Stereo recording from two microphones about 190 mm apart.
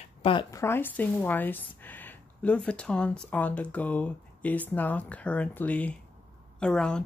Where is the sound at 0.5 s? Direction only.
10° left (ahead or behind).